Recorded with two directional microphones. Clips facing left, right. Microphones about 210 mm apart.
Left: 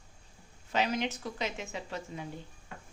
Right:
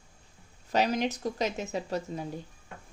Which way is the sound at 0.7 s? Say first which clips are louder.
Right 4 dB; 35° right (ahead or behind).